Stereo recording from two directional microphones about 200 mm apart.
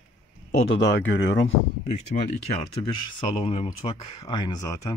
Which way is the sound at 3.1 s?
30° left (ahead or behind).